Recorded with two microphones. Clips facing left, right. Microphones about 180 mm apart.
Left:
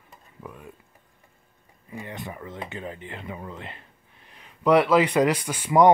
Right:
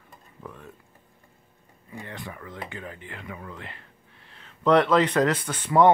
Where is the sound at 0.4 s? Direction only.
10° left (ahead or behind).